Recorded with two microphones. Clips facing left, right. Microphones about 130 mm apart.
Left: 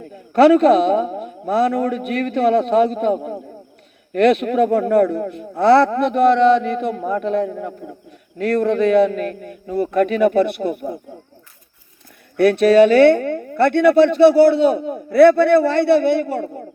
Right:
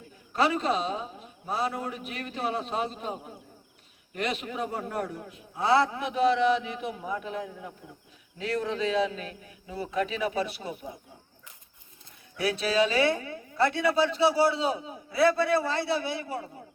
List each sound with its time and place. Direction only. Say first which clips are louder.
0.0 s a man's voice: left 14 dB; 65° left (ahead or behind)
12.4 s speech: left 14 dB; 60° left (ahead or behind)